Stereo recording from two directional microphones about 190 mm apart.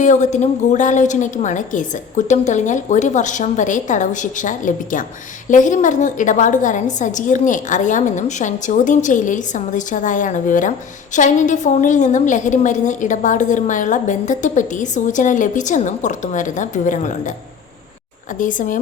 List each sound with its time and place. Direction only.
0.0 s a woman's voice: 40° left (ahead or behind)
18.3 s speech: 45° left (ahead or behind)